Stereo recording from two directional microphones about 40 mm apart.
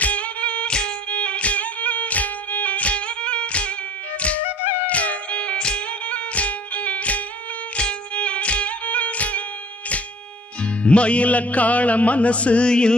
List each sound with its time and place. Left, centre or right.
0.0 s music: left
4.5 s music: right
4.8 s music: left
10.6 s music: left